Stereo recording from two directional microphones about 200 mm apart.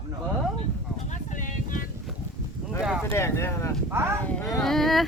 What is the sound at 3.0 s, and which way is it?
Speech, 10° left (ahead or behind).